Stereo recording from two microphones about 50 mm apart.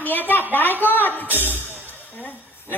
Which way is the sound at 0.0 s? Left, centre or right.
Left.